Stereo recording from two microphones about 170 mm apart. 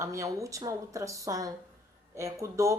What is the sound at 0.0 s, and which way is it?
Speech, 20° right (ahead or behind).